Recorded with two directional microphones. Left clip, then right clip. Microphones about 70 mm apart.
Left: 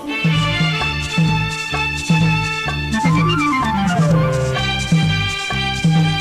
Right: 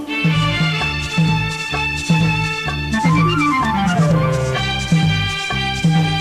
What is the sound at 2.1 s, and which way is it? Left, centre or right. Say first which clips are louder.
Music: even; left.